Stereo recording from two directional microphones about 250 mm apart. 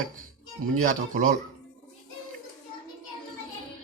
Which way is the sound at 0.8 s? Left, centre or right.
Right.